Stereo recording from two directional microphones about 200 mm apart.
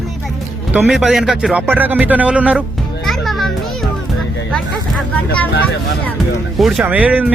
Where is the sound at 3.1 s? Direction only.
Centre (ahead or behind).